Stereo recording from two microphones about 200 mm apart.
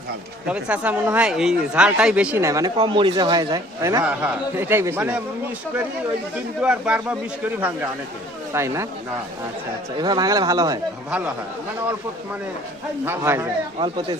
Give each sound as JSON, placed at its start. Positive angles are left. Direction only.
{"t": 0.4, "sound": "a man's voice", "side_deg": -5}
{"t": 4.0, "sound": "speech", "side_deg": -5}
{"t": 6.6, "sound": "speech", "side_deg": -5}
{"t": 10.0, "sound": "speech", "side_deg": -20}
{"t": 13.1, "sound": "speech", "side_deg": -10}
{"t": 13.7, "sound": "a man's voice", "side_deg": -25}